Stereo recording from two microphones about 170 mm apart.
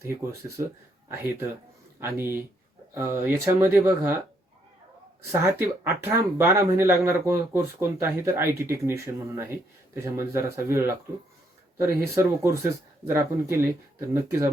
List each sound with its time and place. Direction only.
0.0 s speech: 15° right (ahead or behind)
2.0 s speech: 15° right (ahead or behind)
5.3 s speech: 15° right (ahead or behind)